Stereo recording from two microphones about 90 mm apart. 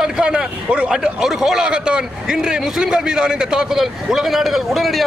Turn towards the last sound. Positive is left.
turn(degrees=0)  # may be behind; listen again after turning